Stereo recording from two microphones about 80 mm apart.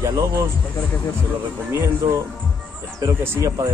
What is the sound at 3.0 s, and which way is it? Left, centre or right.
Speech, right.